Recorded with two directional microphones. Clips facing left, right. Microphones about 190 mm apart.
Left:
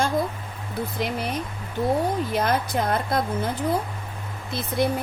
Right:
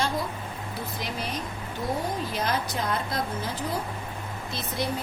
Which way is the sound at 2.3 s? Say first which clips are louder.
Left 5 dB; 55° left (ahead or behind).